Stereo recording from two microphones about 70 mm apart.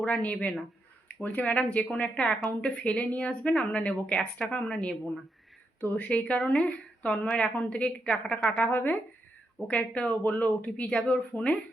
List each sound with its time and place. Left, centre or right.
0.0 s a woman's voice: left
9.6 s a woman's voice: centre